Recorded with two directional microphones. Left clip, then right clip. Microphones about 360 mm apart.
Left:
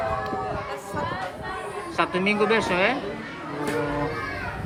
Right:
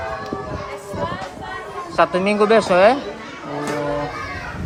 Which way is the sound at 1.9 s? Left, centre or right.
Centre.